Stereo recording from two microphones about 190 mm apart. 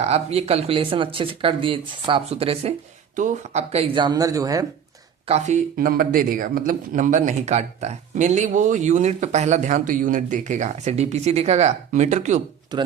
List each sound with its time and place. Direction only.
0.0 s speech: 35° right (ahead or behind); by 4.6 s 15° right (ahead or behind)
5.7 s speech: 50° right (ahead or behind)
12.7 s speech: 25° right (ahead or behind)